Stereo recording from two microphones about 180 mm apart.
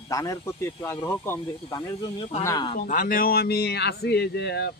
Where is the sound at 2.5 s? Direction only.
25° left (ahead or behind).